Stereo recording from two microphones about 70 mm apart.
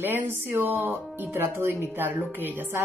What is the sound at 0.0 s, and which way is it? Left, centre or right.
Speech, right.